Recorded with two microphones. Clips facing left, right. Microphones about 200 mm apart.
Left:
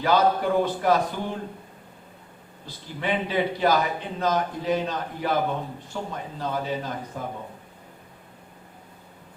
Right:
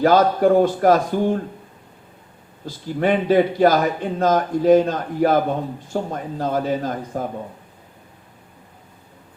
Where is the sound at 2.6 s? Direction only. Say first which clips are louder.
Right 9 dB; 50° right (ahead or behind).